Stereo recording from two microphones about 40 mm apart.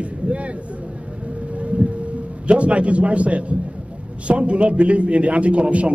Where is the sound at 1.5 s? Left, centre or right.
Right.